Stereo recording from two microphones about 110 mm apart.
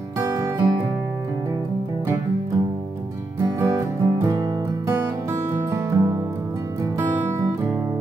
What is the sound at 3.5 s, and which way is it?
Music, 25° right (ahead or behind).